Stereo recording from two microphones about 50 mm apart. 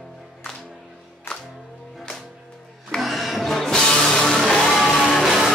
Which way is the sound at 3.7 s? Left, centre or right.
Centre.